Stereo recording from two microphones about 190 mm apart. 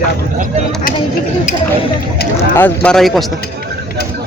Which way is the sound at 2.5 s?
10° left (ahead or behind).